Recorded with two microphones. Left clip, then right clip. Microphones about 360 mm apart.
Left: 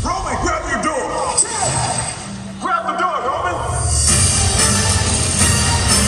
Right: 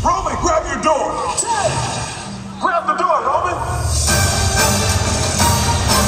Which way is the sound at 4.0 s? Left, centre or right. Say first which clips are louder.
Right 1 dB; centre.